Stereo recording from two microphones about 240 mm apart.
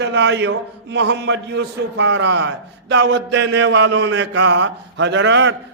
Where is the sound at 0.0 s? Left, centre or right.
Right.